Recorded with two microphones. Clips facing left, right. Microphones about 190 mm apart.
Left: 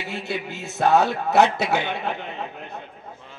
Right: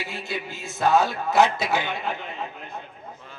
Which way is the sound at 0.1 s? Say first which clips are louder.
Left 3 dB; 65° left (ahead or behind).